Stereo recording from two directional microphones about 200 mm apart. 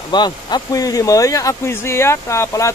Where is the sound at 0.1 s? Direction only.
20° left (ahead or behind).